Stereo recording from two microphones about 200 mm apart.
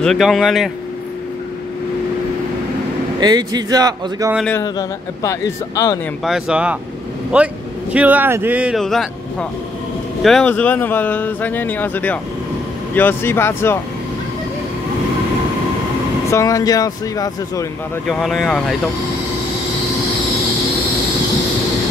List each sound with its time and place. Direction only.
0.0 s speech: centre (ahead or behind)
3.2 s speech: 20° right (ahead or behind)
4.5 s speech: 15° left (ahead or behind)
6.2 s speech: centre (ahead or behind)
16.3 s speech: 15° left (ahead or behind)
18.0 s speech: centre (ahead or behind)